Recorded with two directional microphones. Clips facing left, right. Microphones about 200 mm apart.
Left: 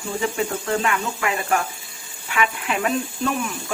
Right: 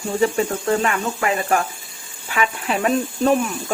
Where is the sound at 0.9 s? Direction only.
40° right (ahead or behind).